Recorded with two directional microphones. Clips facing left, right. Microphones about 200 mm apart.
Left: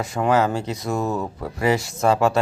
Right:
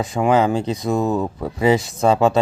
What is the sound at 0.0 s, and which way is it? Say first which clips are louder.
Speech: right 3 dB; 20° right (ahead or behind).